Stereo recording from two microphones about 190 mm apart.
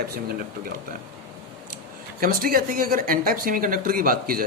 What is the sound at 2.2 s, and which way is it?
Speech, 50° right (ahead or behind).